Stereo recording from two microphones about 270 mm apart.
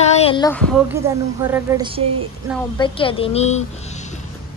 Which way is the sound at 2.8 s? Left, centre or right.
Centre.